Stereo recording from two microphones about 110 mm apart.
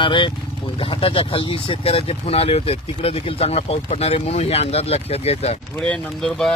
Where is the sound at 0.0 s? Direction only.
45° left (ahead or behind); by 5.6 s 65° left (ahead or behind).